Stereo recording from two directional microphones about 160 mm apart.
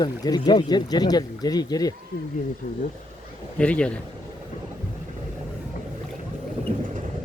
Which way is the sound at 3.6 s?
5° left (ahead or behind).